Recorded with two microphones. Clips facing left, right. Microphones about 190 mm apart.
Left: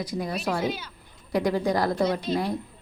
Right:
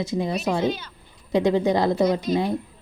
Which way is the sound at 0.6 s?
10° left (ahead or behind).